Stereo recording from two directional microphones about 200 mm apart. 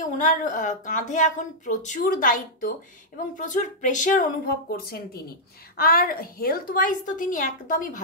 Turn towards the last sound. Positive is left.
turn(degrees=40)  # may be behind; listen again after turning